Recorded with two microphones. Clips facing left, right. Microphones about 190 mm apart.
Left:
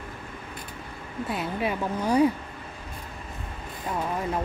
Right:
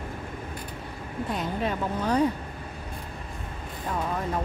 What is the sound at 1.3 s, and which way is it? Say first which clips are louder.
Speech: left 1 dB; 10° left (ahead or behind).